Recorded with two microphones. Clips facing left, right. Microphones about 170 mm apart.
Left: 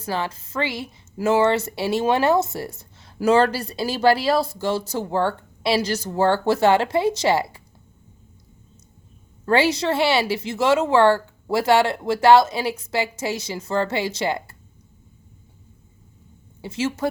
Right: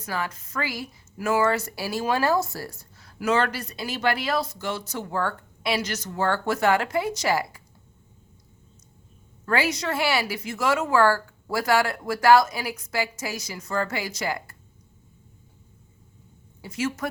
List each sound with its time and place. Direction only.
0.0 s a woman's voice: 30° left (ahead or behind)
9.5 s a woman's voice: 30° left (ahead or behind)
16.6 s a woman's voice: 25° left (ahead or behind)